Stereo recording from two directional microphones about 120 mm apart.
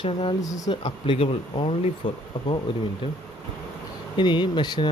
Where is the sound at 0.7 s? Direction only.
45° left (ahead or behind).